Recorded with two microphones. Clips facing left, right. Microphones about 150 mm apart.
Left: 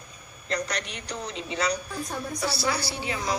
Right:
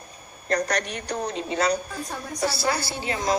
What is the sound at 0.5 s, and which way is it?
A woman's voice, 50° right (ahead or behind).